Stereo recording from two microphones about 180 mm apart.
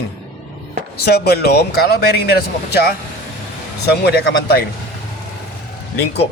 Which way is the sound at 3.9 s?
65° left (ahead or behind).